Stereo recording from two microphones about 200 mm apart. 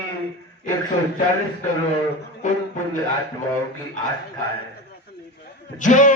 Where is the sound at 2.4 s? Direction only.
40° left (ahead or behind).